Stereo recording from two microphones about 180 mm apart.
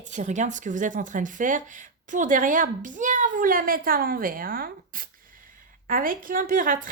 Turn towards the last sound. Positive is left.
turn(degrees=-50)  # may be behind; listen again after turning